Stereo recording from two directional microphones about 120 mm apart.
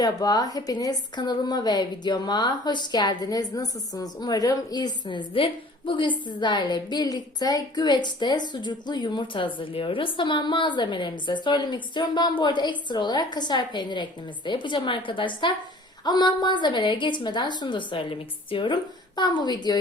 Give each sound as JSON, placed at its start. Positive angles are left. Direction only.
{"t": 0.0, "sound": "a woman's voice", "side_deg": 30}
{"t": 5.0, "sound": "a woman's voice", "side_deg": 45}